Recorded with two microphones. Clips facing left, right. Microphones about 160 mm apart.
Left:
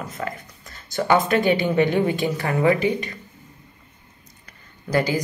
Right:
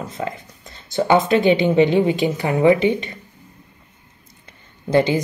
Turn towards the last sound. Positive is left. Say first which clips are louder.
# right 5 dB
turn(degrees=-25)  # may be behind; listen again after turning